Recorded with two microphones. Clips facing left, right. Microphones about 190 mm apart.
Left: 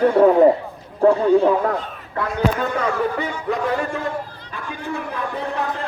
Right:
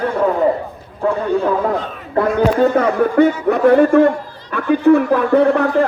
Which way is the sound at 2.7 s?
60° right (ahead or behind).